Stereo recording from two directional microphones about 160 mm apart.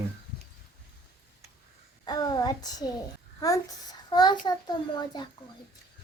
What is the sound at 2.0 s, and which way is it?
A child's voice, 25° left (ahead or behind).